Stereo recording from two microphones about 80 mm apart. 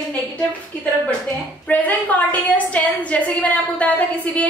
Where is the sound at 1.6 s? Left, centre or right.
Centre.